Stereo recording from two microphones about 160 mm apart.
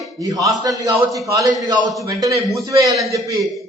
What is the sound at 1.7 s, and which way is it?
Speech, 25° right (ahead or behind).